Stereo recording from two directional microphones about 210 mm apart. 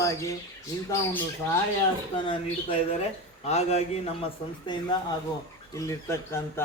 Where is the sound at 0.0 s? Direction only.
15° left (ahead or behind).